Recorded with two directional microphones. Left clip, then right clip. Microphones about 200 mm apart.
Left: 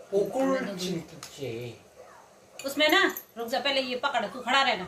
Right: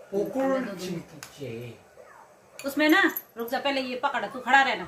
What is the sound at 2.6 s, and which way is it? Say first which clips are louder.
Speech: right 1 dB; 40° right (ahead or behind).